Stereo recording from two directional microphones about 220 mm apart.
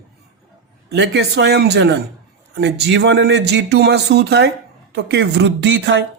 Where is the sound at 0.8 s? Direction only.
50° right (ahead or behind).